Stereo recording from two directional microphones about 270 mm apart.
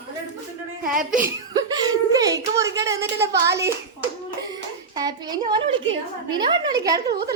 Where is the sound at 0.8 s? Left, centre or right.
Right.